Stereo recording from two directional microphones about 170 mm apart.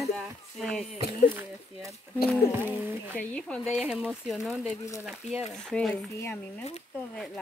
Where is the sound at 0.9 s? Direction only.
70° left (ahead or behind).